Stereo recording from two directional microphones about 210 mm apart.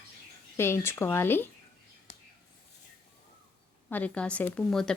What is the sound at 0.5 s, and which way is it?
Speech, 10° left (ahead or behind).